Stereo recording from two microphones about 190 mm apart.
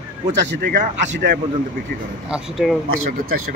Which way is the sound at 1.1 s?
60° right (ahead or behind).